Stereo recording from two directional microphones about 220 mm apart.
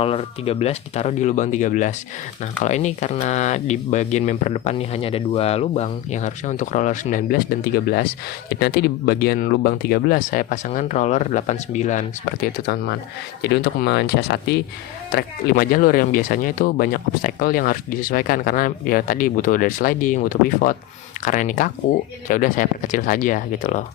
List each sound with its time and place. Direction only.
0.0 s speech: 25° left (ahead or behind)